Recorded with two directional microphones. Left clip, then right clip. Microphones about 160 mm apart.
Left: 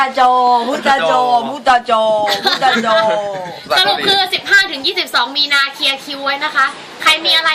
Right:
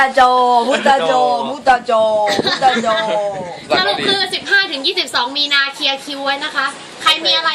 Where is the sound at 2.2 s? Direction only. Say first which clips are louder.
Even; 40° left (ahead or behind).